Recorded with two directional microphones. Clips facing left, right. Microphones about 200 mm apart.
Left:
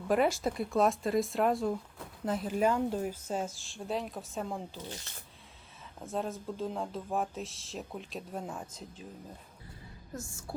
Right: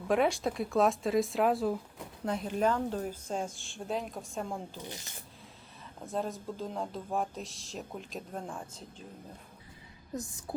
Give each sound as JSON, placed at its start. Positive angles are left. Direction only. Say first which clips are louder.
{"t": 0.1, "sound": "speech", "louder": "even", "side_deg": 0}
{"t": 6.1, "sound": "speech", "louder": "even", "side_deg": 0}
{"t": 10.2, "sound": "speech", "louder": "right 4 dB", "side_deg": -15}